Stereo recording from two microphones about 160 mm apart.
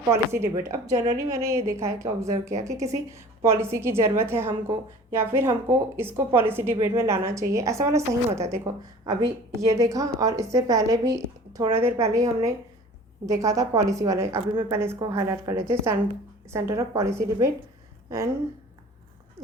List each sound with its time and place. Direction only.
0.1 s a woman's voice: 15° right (ahead or behind)